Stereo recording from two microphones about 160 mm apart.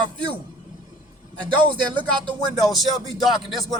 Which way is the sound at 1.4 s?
30° right (ahead or behind).